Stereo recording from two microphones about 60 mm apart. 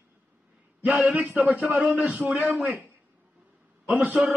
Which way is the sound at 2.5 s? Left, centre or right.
Right.